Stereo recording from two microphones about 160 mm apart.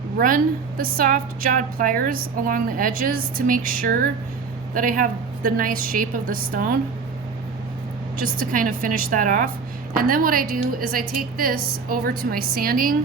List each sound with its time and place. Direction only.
0.8 s a woman's voice: 60° right (ahead or behind)
8.5 s a woman's voice: 55° right (ahead or behind)